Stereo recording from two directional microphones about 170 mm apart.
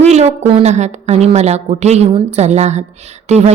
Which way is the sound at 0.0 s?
40° right (ahead or behind).